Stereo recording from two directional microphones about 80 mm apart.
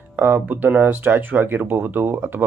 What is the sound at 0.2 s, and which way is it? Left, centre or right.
A man's voice, right.